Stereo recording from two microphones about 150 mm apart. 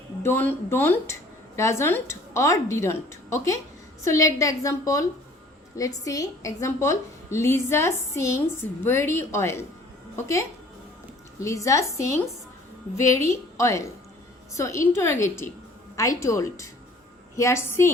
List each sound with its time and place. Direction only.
0.2 s a woman's voice: 15° left (ahead or behind)
11.3 s a woman's voice: 20° left (ahead or behind)